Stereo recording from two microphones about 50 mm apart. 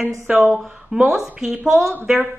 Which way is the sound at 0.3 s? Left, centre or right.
Right.